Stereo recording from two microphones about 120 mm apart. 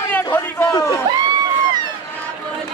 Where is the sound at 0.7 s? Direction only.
30° left (ahead or behind).